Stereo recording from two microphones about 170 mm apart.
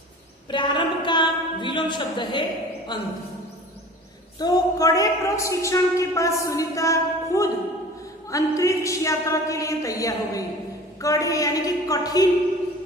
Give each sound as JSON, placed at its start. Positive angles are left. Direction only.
{"t": 0.5, "sound": "a sound", "side_deg": 25}
{"t": 2.9, "sound": "a woman's voice", "side_deg": 25}
{"t": 4.4, "sound": "a woman's voice", "side_deg": 20}